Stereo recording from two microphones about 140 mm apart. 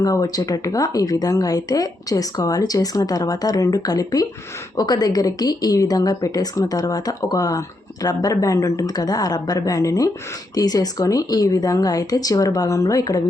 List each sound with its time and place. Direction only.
0.0 s speech: 25° left (ahead or behind)